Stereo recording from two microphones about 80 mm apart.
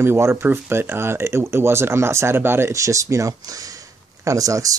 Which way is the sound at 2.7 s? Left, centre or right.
Right.